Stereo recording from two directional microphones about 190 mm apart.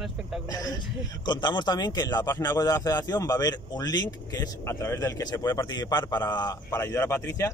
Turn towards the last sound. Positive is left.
turn(degrees=15)  # may be behind; listen again after turning